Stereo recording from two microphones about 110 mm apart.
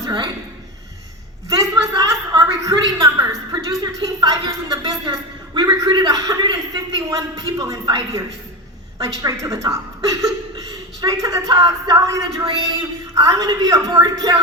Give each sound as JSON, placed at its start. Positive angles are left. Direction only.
{"t": 1.5, "sound": "a sound", "side_deg": -35}
{"t": 7.6, "sound": "speech", "side_deg": -35}
{"t": 9.2, "sound": "speech", "side_deg": -30}